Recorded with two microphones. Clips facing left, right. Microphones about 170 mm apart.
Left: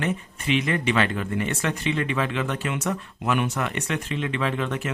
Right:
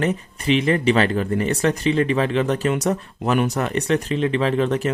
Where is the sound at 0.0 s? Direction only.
40° right (ahead or behind).